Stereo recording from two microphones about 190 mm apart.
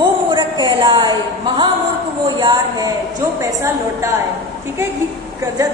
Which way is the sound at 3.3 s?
15° right (ahead or behind).